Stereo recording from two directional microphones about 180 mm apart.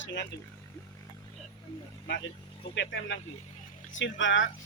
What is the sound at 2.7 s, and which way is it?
Speech, 90° left.